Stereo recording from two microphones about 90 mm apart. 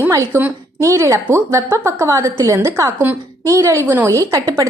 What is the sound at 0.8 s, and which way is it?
A woman's voice, 35° right (ahead or behind).